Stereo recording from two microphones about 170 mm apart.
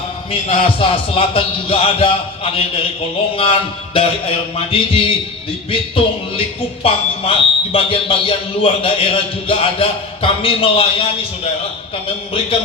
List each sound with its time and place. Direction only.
0.3 s speech: 35° left (ahead or behind)
6.8 s speech: 35° left (ahead or behind)